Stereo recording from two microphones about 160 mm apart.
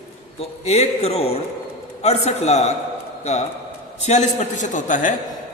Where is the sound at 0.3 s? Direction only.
40° left (ahead or behind).